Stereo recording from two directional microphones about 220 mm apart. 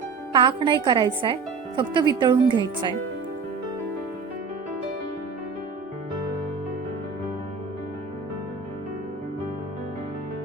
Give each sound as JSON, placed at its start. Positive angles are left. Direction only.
{"t": 0.3, "sound": "a woman's voice", "side_deg": -20}